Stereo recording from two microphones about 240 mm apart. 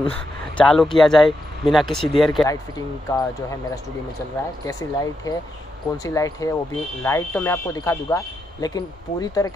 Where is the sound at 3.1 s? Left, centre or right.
Centre.